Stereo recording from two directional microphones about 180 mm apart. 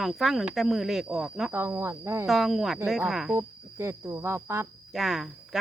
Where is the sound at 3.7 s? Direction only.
15° right (ahead or behind).